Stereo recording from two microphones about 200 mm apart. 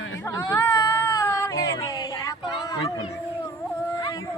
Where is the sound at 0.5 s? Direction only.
15° left (ahead or behind).